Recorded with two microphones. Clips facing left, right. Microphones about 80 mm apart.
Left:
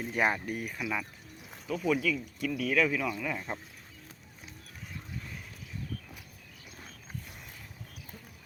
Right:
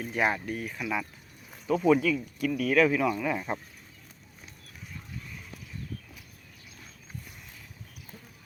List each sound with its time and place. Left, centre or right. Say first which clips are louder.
0.1 s speech: right 1 dB; centre
0.8 s speech: right 3 dB; centre
1.6 s speech: right 7 dB; centre
2.0 s speech: right 4 dB; centre